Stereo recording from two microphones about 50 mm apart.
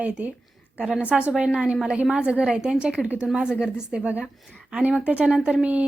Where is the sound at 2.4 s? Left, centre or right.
Centre.